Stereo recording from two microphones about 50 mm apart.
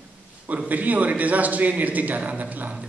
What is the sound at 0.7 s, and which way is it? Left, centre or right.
A woman's voice, right.